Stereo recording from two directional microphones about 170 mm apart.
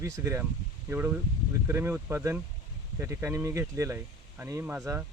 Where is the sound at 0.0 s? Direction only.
15° right (ahead or behind).